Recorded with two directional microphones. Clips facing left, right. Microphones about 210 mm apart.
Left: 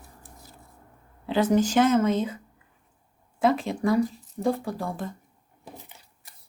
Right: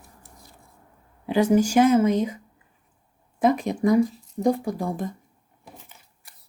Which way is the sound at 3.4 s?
15° right (ahead or behind).